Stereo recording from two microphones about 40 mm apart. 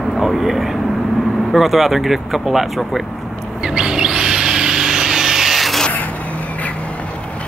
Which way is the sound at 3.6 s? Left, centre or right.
Centre.